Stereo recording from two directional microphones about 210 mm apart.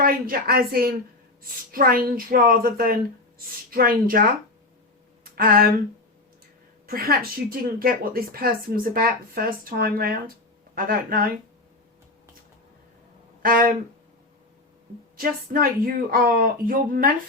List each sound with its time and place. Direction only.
0.0 s a woman's voice: 45° right (ahead or behind)
5.2 s a sound: 45° right (ahead or behind)
6.8 s a woman's voice: 45° right (ahead or behind)
13.4 s speech: 40° right (ahead or behind)
15.2 s a woman's voice: 45° right (ahead or behind)